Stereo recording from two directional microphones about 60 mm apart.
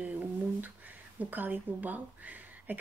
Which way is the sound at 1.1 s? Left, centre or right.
Right.